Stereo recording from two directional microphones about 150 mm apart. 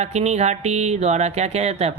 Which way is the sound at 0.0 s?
45° right (ahead or behind).